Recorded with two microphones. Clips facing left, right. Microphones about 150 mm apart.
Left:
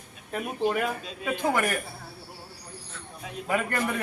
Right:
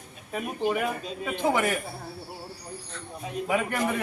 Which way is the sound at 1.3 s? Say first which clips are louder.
Right 1 dB; 20° right (ahead or behind).